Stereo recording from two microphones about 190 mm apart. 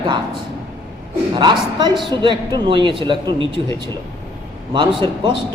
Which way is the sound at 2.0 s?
25° right (ahead or behind).